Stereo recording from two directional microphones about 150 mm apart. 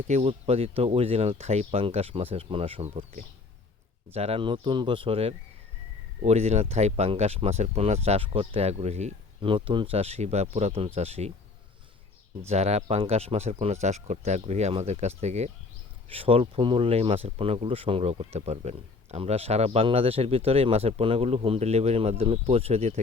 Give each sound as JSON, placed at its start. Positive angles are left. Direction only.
{"t": 0.1, "sound": "speech", "side_deg": -40}
{"t": 9.4, "sound": "speech", "side_deg": -35}
{"t": 12.5, "sound": "speech", "side_deg": -45}
{"t": 16.0, "sound": "speech", "side_deg": -40}